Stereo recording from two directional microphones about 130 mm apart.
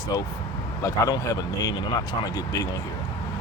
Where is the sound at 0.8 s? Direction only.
25° left (ahead or behind).